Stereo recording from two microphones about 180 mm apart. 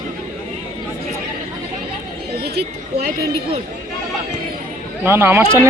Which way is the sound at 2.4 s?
60° right (ahead or behind).